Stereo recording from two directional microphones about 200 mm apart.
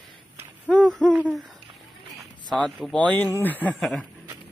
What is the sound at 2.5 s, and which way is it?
A man's voice, 5° left (ahead or behind).